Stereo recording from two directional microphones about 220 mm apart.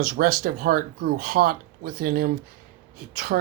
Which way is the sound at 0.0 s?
40° right (ahead or behind).